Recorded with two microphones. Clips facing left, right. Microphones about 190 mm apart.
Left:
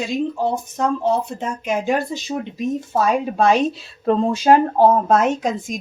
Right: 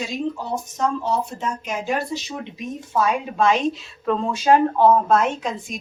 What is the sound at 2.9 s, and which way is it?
A woman's voice, 40° left (ahead or behind).